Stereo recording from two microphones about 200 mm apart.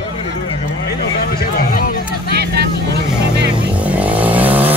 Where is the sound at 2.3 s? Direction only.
55° right (ahead or behind).